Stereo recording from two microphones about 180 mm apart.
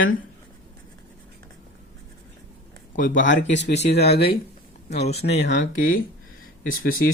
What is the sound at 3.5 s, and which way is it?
Speech, 80° left.